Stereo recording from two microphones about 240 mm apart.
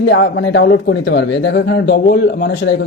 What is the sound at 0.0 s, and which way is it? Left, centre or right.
Speech, left.